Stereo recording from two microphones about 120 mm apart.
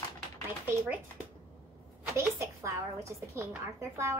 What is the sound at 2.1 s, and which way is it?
A woman's voice, 25° right (ahead or behind).